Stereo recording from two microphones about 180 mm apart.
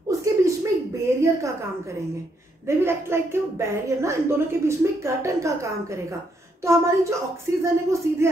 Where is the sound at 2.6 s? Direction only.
15° right (ahead or behind).